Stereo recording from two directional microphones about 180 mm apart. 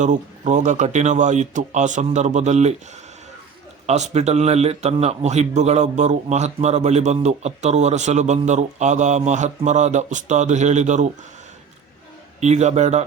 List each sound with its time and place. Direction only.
0.0 s a man's voice: 45° right (ahead or behind)
12.4 s a man's voice: 40° right (ahead or behind)